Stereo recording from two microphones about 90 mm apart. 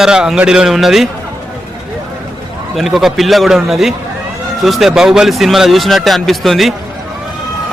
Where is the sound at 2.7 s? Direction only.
Centre (ahead or behind).